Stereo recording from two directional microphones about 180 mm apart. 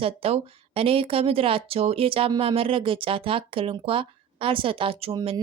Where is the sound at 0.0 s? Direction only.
30° right (ahead or behind).